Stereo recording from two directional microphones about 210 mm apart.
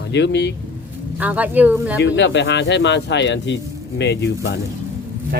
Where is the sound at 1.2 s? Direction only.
5° right (ahead or behind).